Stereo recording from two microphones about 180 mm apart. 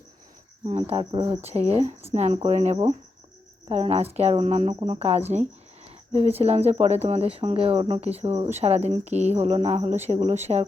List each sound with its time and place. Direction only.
0.7 s speech: 30° right (ahead or behind)